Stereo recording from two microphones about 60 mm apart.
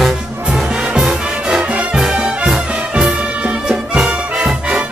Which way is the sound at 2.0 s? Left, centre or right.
Centre.